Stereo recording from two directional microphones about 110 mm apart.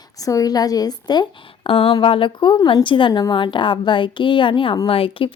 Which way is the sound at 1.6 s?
55° left (ahead or behind).